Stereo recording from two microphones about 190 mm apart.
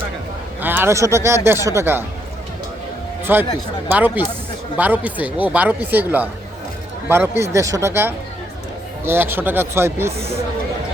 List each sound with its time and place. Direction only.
0.6 s speech: 10° right (ahead or behind)
3.3 s speech: 10° right (ahead or behind)
10.2 s speech: 30° right (ahead or behind)